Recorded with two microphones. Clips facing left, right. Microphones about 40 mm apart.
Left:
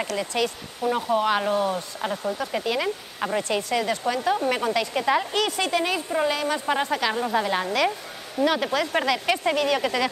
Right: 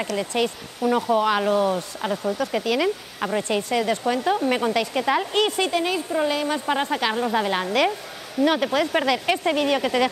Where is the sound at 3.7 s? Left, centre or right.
Right.